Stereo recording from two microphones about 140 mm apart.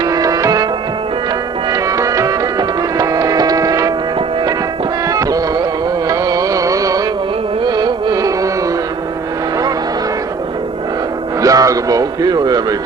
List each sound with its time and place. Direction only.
0.0 s music: 25° right (ahead or behind)
1.7 s music: 25° right (ahead or behind)
5.0 s music: 25° right (ahead or behind)
11.4 s a sound: 25° right (ahead or behind)